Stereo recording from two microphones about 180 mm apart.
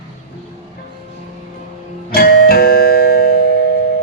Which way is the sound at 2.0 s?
60° left (ahead or behind).